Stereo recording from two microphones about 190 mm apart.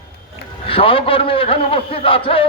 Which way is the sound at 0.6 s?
30° left (ahead or behind).